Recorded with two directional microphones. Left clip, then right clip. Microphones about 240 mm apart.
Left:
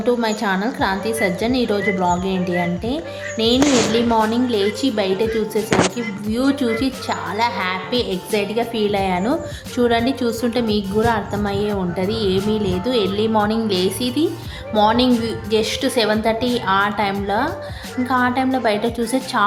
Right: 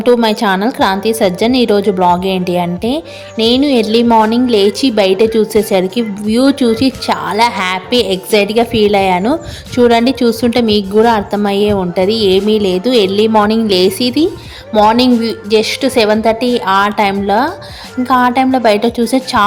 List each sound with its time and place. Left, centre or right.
0.0 s a woman's voice: right